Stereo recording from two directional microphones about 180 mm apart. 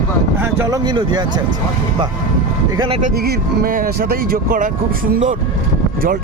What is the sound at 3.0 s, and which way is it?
Speech, 60° right (ahead or behind).